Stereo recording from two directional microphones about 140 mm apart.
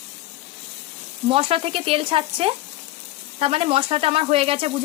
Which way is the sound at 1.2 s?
45° right (ahead or behind).